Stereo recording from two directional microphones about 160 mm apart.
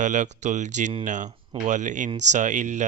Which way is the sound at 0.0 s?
50° right (ahead or behind).